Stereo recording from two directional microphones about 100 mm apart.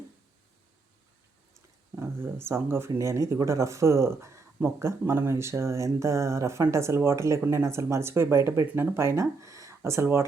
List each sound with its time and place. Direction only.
2.0 s speech: 25° right (ahead or behind)